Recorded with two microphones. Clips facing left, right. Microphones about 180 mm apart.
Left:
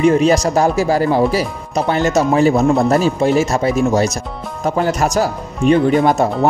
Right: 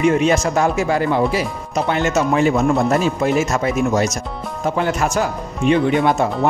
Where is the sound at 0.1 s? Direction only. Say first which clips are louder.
Left 3 dB; 35° left (ahead or behind).